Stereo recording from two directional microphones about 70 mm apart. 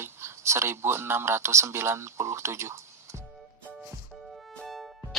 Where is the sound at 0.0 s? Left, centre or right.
Right.